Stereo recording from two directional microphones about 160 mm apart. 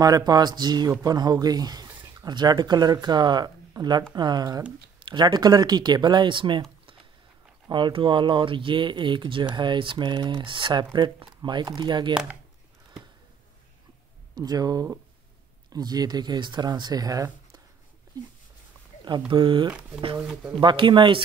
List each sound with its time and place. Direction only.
0.0 s speech: 25° right (ahead or behind)
14.3 s speech: 25° right (ahead or behind)
19.0 s speech: 30° right (ahead or behind)
20.2 s speech: 5° right (ahead or behind)
20.6 s speech: 30° right (ahead or behind)